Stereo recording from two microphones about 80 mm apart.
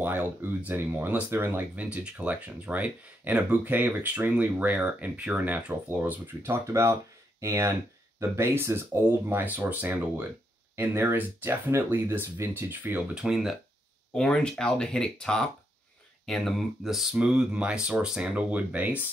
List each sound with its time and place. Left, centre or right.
0.0 s speech: right
13.1 s speech: centre
14.1 s speech: centre; by 19.0 s right